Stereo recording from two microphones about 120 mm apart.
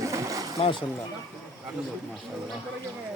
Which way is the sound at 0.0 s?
25° right (ahead or behind).